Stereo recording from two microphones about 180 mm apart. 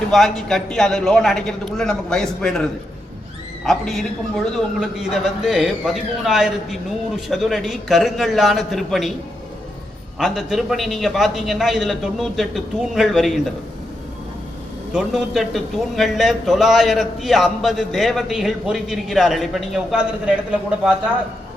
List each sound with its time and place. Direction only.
0.1 s a man's voice: centre (ahead or behind)
10.2 s a man's voice: centre (ahead or behind)
14.9 s a man's voice: centre (ahead or behind)